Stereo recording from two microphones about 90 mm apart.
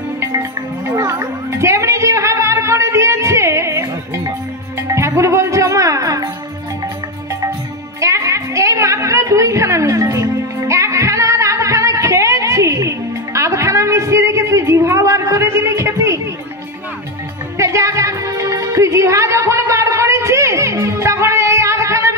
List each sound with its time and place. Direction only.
0.2 s music: 30° right (ahead or behind)
8.0 s a sound: 35° right (ahead or behind)
17.6 s music: 35° right (ahead or behind)